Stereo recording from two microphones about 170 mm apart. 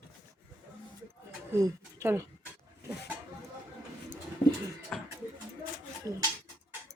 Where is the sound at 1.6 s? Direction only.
15° right (ahead or behind).